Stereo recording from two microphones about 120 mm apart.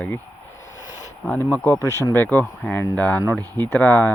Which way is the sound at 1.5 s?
20° left (ahead or behind).